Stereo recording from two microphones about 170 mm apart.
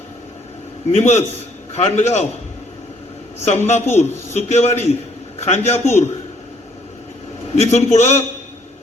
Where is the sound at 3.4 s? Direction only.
40° left (ahead or behind).